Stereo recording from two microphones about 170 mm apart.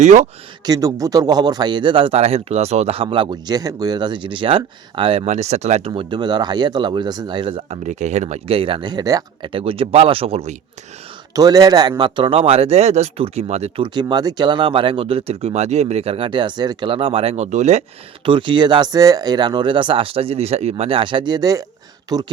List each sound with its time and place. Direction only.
0.0 s speech: 45° right (ahead or behind)
0.6 s speech: 20° right (ahead or behind)
7.9 s speech: 45° right (ahead or behind)
11.3 s speech: 20° right (ahead or behind); by 17.8 s 40° right (ahead or behind)
18.3 s speech: 30° right (ahead or behind)